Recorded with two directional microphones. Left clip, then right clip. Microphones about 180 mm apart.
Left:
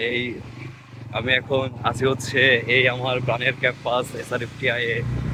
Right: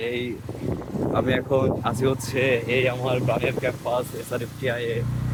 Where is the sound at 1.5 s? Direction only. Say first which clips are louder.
Right 1 dB; 10° right (ahead or behind).